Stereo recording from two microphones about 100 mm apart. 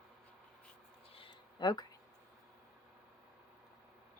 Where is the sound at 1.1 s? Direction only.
55° left (ahead or behind).